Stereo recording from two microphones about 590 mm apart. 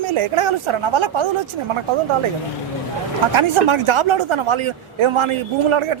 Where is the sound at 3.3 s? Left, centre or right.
Right.